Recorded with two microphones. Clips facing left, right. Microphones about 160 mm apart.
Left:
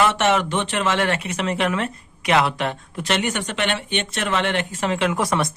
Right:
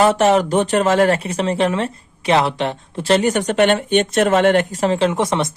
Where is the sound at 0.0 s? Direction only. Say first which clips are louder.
Right 5 dB; 40° right (ahead or behind).